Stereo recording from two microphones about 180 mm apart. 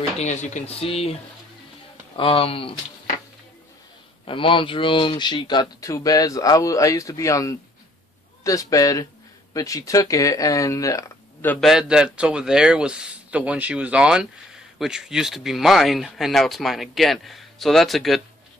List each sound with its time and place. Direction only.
0.2 s speech: 40° left (ahead or behind)
2.1 s speech: 30° left (ahead or behind)
4.3 s speech: 30° left (ahead or behind)
11.5 s speech: centre (ahead or behind)